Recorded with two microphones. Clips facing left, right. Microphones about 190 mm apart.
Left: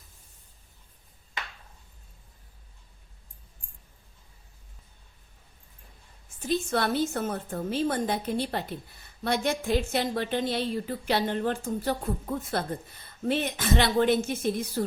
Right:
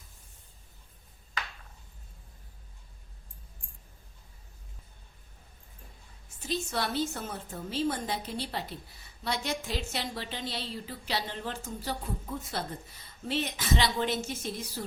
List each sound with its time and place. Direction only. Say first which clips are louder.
6.5 s a woman's voice: left 6 dB; 55° left (ahead or behind)